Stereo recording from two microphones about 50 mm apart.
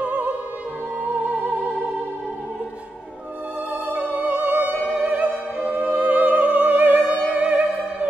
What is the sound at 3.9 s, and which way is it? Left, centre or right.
Music, right.